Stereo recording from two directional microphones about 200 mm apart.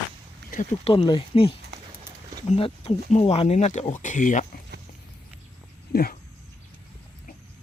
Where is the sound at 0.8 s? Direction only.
25° left (ahead or behind).